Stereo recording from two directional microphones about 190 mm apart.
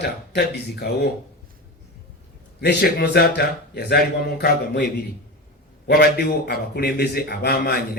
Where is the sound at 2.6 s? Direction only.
60° left (ahead or behind).